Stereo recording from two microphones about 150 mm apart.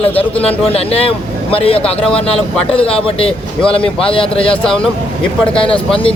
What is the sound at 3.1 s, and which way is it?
Speech, 40° left (ahead or behind).